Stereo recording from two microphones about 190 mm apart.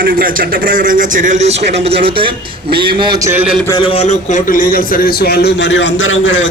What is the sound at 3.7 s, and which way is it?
A man's voice, 30° left (ahead or behind).